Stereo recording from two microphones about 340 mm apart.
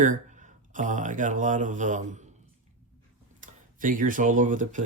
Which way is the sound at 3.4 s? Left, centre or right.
Right.